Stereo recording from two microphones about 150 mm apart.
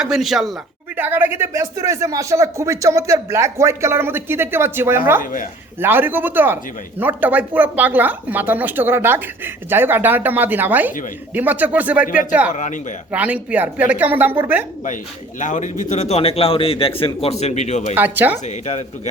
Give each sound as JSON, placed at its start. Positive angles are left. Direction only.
{"t": 0.0, "sound": "speech", "side_deg": 0}
{"t": 0.9, "sound": "speech", "side_deg": -15}
{"t": 5.2, "sound": "a man's voice", "side_deg": 60}
{"t": 5.8, "sound": "speech", "side_deg": -15}
{"t": 12.0, "sound": "a man's voice", "side_deg": 60}
{"t": 13.1, "sound": "speech", "side_deg": -10}
{"t": 15.4, "sound": "a man's voice", "side_deg": 55}
{"t": 17.4, "sound": "speech", "side_deg": 50}
{"t": 17.9, "sound": "speech", "side_deg": -10}
{"t": 18.4, "sound": "speech", "side_deg": 50}